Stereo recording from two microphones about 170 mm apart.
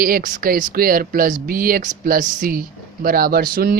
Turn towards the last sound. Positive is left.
turn(degrees=-60)  # may be behind; listen again after turning